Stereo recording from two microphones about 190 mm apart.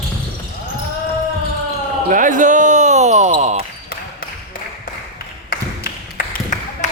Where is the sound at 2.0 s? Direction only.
45° right (ahead or behind).